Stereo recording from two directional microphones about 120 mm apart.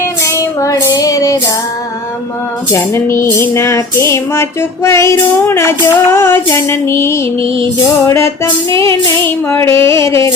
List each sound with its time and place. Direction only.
0.0 s child singing: 25° left (ahead or behind)
2.7 s music: 20° left (ahead or behind)
7.4 s music: 45° right (ahead or behind)
8.0 s music: 25° left (ahead or behind)